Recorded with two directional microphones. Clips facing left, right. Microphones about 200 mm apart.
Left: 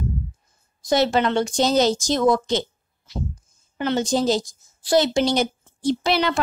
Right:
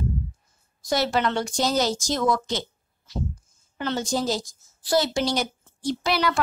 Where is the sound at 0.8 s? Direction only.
20° left (ahead or behind).